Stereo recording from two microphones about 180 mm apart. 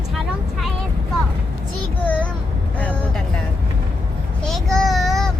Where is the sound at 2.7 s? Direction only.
5° left (ahead or behind).